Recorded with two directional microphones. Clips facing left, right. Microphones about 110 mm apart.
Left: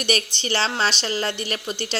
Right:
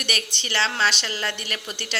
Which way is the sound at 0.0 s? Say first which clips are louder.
Left 6 dB; 35° left (ahead or behind).